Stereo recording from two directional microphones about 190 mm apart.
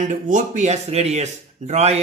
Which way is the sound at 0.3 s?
40° right (ahead or behind).